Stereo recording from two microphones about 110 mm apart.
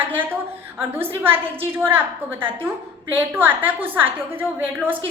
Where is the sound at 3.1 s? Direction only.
15° right (ahead or behind).